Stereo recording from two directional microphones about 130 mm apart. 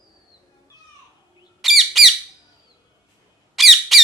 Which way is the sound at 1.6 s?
Centre (ahead or behind).